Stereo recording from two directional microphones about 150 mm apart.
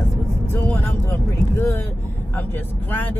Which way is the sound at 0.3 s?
15° left (ahead or behind).